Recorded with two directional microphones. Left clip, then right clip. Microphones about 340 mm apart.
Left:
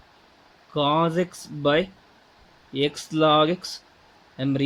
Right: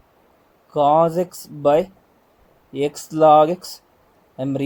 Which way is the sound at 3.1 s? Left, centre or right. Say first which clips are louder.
Right 7 dB; right.